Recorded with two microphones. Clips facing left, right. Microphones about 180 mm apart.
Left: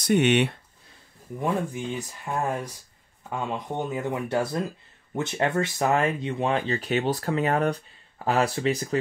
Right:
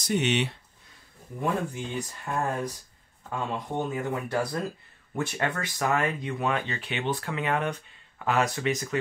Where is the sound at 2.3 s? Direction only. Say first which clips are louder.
Left 1 dB; 10° left (ahead or behind).